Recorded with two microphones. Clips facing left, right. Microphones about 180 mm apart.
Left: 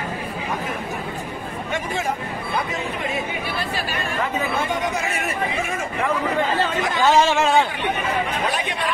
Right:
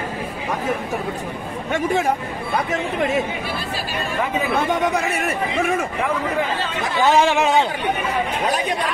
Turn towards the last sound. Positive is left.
turn(degrees=-15)  # may be behind; listen again after turning